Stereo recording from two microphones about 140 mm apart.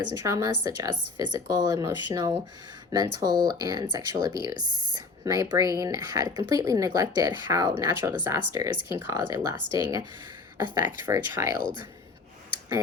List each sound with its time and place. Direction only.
0.1 s a woman's voice: 25° right (ahead or behind)